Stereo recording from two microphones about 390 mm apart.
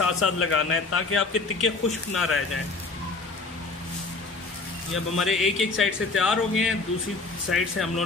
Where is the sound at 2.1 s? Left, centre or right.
Centre.